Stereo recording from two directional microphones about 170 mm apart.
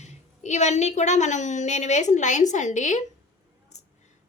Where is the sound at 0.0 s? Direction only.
40° left (ahead or behind).